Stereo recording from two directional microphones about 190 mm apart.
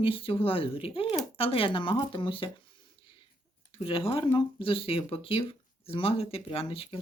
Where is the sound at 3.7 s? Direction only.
30° left (ahead or behind).